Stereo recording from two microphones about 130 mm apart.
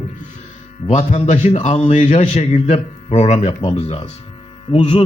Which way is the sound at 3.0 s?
55° left (ahead or behind).